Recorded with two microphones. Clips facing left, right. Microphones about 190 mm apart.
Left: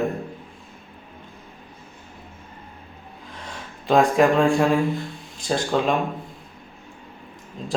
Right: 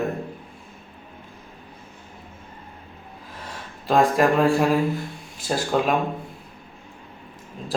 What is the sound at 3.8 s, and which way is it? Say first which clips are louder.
Speech: left 1 dB; centre (ahead or behind).